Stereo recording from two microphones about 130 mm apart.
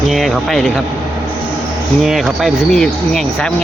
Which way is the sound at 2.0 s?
Centre (ahead or behind).